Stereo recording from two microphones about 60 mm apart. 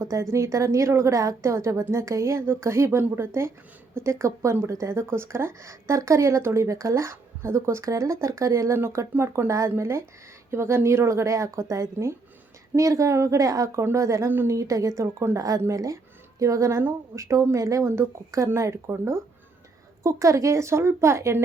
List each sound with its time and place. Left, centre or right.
0.0 s a woman's voice: right
8.7 s a woman's voice: right
13.7 s a woman's voice: right
15.4 s speech: right
16.4 s a woman's voice: right
17.8 s a woman's voice: right
20.0 s a woman's voice: right